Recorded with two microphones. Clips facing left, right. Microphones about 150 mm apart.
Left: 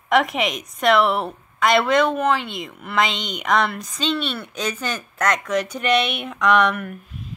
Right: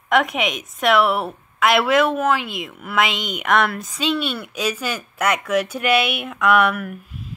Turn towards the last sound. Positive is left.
turn(degrees=0)  # may be behind; listen again after turning